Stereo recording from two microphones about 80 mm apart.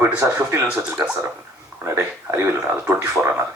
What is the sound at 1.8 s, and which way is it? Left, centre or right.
Speech, right.